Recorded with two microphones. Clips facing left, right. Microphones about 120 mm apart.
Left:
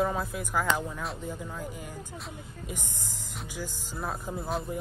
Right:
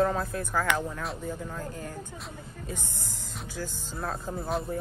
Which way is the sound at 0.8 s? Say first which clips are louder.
Right 1 dB; centre (ahead or behind).